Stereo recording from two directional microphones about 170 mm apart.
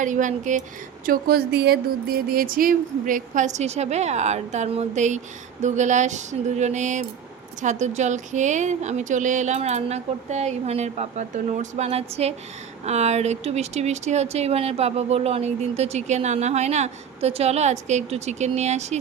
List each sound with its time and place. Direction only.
0.0 s speech: 50° right (ahead or behind)
1.0 s speech: 60° right (ahead or behind); by 18.9 s 40° right (ahead or behind)